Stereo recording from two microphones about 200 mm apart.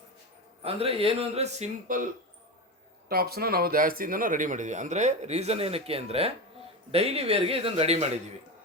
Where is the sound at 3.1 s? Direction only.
50° right (ahead or behind); by 8.1 s 30° right (ahead or behind).